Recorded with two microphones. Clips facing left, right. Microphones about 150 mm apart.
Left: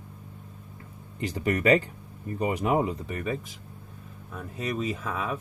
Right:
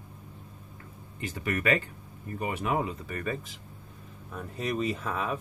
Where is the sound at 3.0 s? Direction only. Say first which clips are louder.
Left 2 dB; 15° left (ahead or behind).